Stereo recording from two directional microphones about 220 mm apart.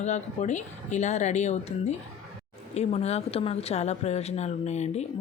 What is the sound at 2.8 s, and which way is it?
Speech, 30° left (ahead or behind).